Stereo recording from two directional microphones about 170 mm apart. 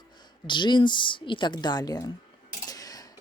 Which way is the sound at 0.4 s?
25° left (ahead or behind).